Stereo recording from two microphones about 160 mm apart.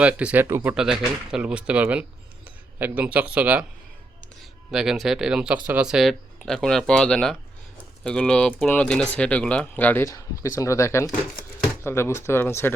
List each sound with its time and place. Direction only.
0.0 s speech: 10° right (ahead or behind)
4.7 s speech: 5° right (ahead or behind); by 12.7 s 15° left (ahead or behind)